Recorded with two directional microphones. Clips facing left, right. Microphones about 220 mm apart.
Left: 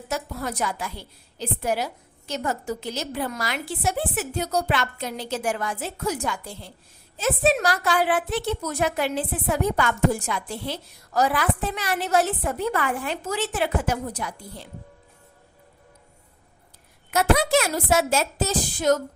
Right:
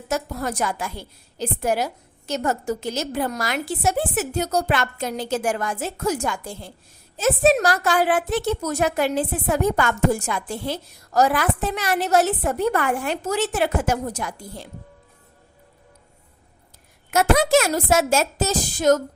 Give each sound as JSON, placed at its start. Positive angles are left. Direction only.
{"t": 0.1, "sound": "a woman's voice", "side_deg": -45}
{"t": 12.5, "sound": "a woman's voice", "side_deg": -55}
{"t": 17.1, "sound": "a woman's voice", "side_deg": -45}